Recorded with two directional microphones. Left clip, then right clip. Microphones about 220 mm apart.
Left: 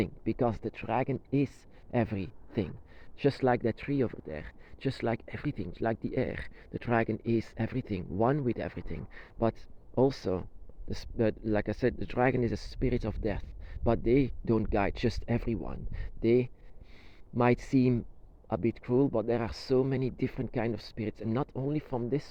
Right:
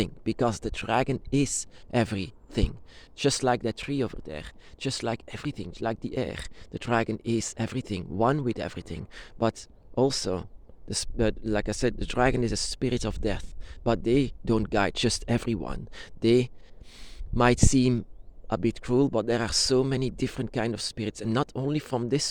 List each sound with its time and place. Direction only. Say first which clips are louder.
0.0 s speech: right 3 dB; 25° right (ahead or behind)
16.9 s a sound: right 3 dB; 25° right (ahead or behind)
18.4 s speech: right 3 dB; 25° right (ahead or behind)